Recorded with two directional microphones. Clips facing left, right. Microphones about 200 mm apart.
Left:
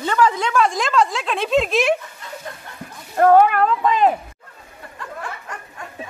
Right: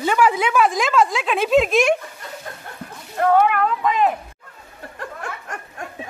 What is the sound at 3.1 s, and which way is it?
Speech, 45° left (ahead or behind).